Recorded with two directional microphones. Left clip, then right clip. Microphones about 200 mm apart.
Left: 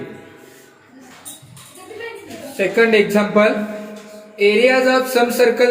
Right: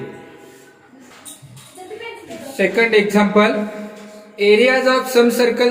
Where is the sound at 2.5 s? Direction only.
15° right (ahead or behind).